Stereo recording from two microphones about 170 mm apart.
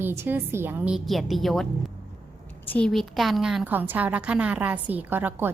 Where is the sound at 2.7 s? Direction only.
5° left (ahead or behind); by 5.5 s 10° right (ahead or behind).